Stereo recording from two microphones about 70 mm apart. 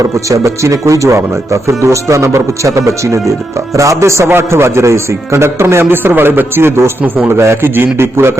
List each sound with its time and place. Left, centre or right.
0.0 s a man's voice: right
7.0 s speech: right
7.3 s a man's voice: right